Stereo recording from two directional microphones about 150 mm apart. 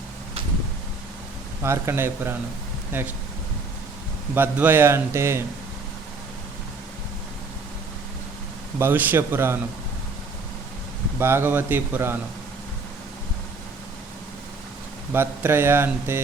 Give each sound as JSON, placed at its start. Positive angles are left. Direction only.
{"t": 1.6, "sound": "speech", "side_deg": -15}
{"t": 4.4, "sound": "speech", "side_deg": -10}
{"t": 8.8, "sound": "speech", "side_deg": -10}
{"t": 11.2, "sound": "speech", "side_deg": -15}
{"t": 15.1, "sound": "speech", "side_deg": -15}